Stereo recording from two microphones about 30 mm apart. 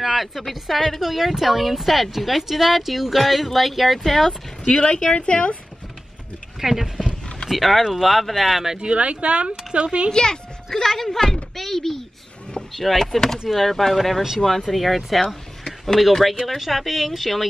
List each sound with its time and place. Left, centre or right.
0.0 s speech: centre
1.0 s speech: centre
4.6 s speech: left
6.6 s speech: centre
8.7 s speech: right
10.1 s a child's voice: left
10.8 s speech: centre